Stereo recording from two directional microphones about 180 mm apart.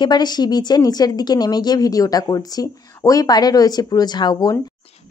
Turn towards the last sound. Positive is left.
turn(degrees=25)  # may be behind; listen again after turning